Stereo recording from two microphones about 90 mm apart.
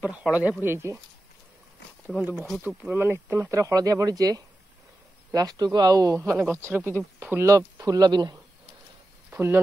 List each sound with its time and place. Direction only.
0.0 s speech: 15° right (ahead or behind)
2.6 s speech: 20° right (ahead or behind); by 6.3 s 40° right (ahead or behind)
6.4 s speech: 25° right (ahead or behind); by 8.4 s 50° right (ahead or behind)
9.3 s speech: 25° right (ahead or behind)